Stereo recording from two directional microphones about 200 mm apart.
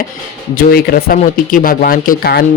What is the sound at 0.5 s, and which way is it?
Speech, 50° left (ahead or behind).